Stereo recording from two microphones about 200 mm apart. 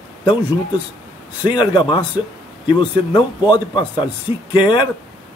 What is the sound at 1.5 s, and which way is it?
Speech, 25° left (ahead or behind).